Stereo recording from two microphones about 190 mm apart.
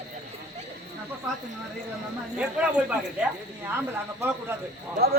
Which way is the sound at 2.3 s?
5° right (ahead or behind).